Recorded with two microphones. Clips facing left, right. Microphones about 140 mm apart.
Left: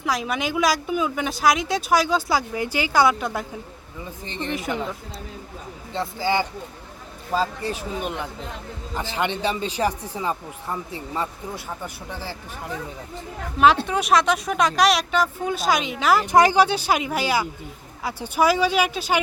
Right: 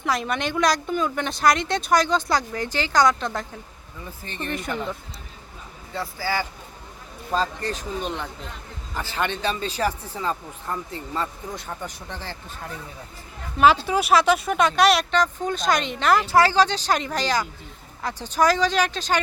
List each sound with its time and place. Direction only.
0.0 s speech: centre (ahead or behind)
4.0 s speech: 20° left (ahead or behind)
5.9 s speech: 20° left (ahead or behind)
7.3 s speech: 10° left (ahead or behind)
13.8 s speech: 5° right (ahead or behind)
16.2 s speech: 15° left (ahead or behind)